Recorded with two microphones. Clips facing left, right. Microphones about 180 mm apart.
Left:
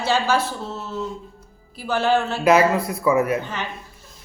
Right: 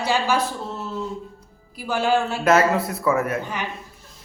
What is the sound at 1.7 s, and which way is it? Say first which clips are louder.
Speech: left 1 dB; 10° right (ahead or behind).